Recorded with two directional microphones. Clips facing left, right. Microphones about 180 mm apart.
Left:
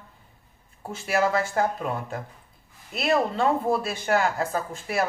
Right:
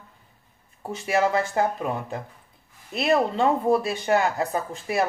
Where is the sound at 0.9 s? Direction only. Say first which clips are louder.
Right 1 dB; 20° right (ahead or behind).